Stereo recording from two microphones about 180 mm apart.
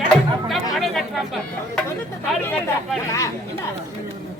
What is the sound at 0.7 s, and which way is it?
Speech, centre (ahead or behind).